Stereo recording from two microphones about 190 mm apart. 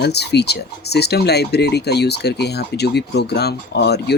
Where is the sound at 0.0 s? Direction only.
60° left (ahead or behind).